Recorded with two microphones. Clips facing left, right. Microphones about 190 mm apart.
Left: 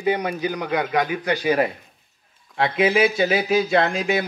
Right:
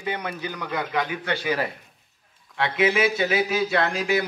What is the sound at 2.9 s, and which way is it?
Speech, 20° left (ahead or behind).